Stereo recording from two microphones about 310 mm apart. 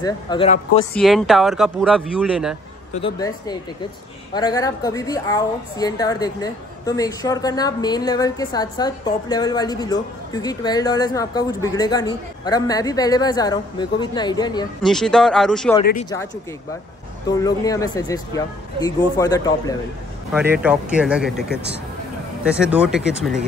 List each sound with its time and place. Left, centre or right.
0.0 s a woman's voice: centre
0.9 s speech: centre
3.0 s a woman's voice: centre
14.8 s speech: centre
15.8 s speech: left
17.3 s a woman's voice: centre
20.6 s speech: centre